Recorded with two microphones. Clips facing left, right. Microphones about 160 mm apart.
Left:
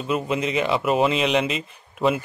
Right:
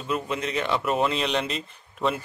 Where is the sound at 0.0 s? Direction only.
15° left (ahead or behind).